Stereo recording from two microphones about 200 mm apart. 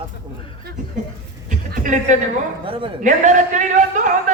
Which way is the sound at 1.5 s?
40° right (ahead or behind).